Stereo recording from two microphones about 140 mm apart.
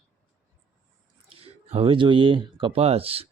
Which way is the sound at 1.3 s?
45° right (ahead or behind).